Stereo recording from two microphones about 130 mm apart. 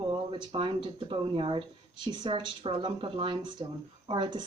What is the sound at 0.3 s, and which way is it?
Speech, 40° right (ahead or behind).